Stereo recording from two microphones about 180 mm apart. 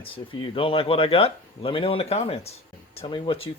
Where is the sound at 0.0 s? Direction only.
30° left (ahead or behind).